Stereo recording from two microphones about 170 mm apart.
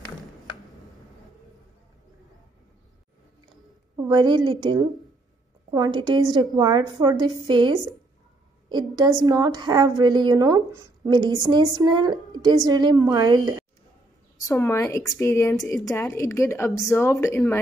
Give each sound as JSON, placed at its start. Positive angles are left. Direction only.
{"t": 4.1, "sound": "a woman's voice", "side_deg": -25}
{"t": 14.4, "sound": "a woman's voice", "side_deg": 15}